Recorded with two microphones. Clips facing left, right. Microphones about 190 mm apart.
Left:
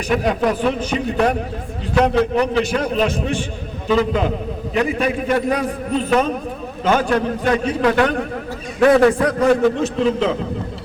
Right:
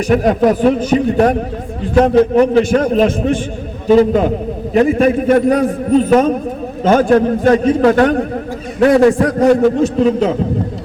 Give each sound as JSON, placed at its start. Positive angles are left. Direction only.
{"t": 0.1, "sound": "a man's voice", "side_deg": -45}
{"t": 9.0, "sound": "a man's voice", "side_deg": -25}
{"t": 9.2, "sound": "a man's voice", "side_deg": -40}